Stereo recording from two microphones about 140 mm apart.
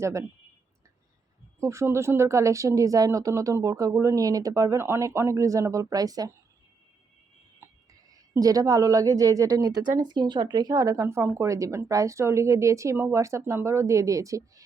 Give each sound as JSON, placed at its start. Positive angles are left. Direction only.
{"t": 0.0, "sound": "speech", "side_deg": -20}
{"t": 1.5, "sound": "speech", "side_deg": -20}
{"t": 7.6, "sound": "a sound", "side_deg": -20}
{"t": 8.1, "sound": "speech", "side_deg": -25}